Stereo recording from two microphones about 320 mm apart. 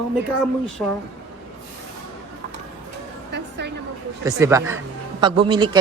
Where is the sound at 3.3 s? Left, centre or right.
Right.